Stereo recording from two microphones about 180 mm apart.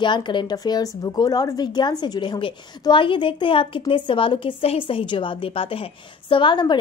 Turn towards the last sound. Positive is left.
turn(degrees=25)  # may be behind; listen again after turning